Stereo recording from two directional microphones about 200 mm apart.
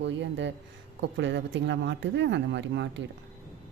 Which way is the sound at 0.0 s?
65° right (ahead or behind).